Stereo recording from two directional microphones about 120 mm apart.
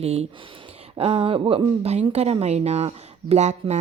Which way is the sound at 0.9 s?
50° right (ahead or behind).